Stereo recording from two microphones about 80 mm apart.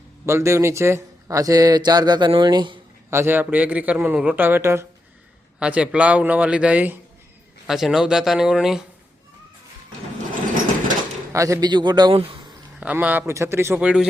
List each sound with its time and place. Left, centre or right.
0.3 s speech: right
3.1 s a man's voice: right
5.5 s a man's voice: centre
7.7 s a man's voice: centre
11.3 s speech: right
11.6 s speech: right
12.8 s a man's voice: centre
13.2 s a man's voice: right
13.7 s a man's voice: centre